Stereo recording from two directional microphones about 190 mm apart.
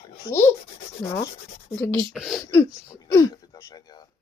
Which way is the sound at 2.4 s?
20° left (ahead or behind).